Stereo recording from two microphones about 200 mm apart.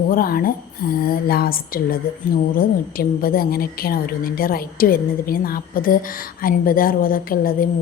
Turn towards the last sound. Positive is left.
turn(degrees=45)  # may be behind; listen again after turning